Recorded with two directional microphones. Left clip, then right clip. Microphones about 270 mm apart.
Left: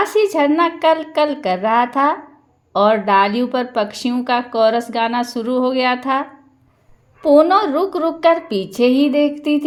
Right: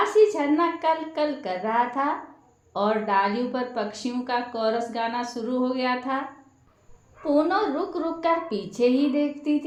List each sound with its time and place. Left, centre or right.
0.0 s speech: left